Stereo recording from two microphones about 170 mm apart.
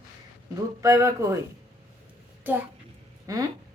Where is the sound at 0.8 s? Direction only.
15° right (ahead or behind).